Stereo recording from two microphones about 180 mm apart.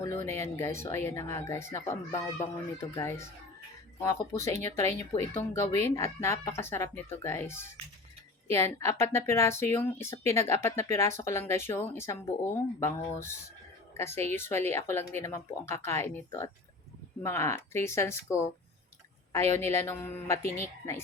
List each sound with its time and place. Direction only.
0.3 s a woman's voice: 15° left (ahead or behind)